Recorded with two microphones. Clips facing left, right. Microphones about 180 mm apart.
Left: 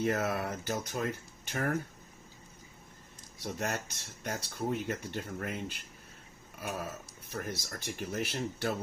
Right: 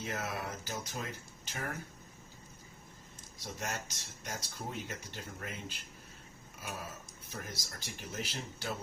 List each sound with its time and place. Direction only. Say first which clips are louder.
0.0 s speech: left 8 dB; 55° left (ahead or behind)
3.4 s speech: left 5 dB; 60° left (ahead or behind)